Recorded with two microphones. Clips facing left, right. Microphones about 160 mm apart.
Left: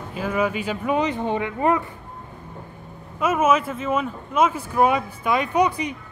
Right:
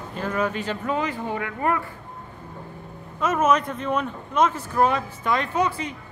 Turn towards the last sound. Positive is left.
turn(degrees=15)  # may be behind; listen again after turning